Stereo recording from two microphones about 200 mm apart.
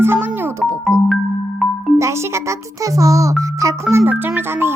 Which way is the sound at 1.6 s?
Centre (ahead or behind).